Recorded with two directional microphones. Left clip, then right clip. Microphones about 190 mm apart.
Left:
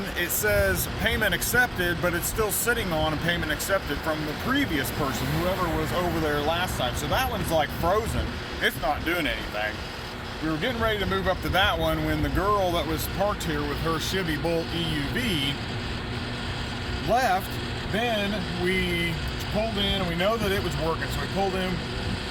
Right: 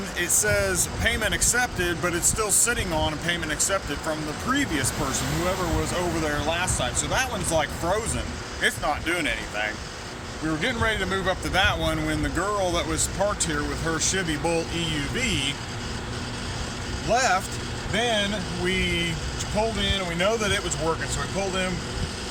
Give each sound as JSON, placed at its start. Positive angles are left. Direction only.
{"t": 0.2, "sound": "speech", "side_deg": 25}
{"t": 6.3, "sound": "speech", "side_deg": 10}
{"t": 12.4, "sound": "speech", "side_deg": 5}
{"t": 14.0, "sound": "speech", "side_deg": -10}
{"t": 17.1, "sound": "speech", "side_deg": -15}
{"t": 19.8, "sound": "speech", "side_deg": -15}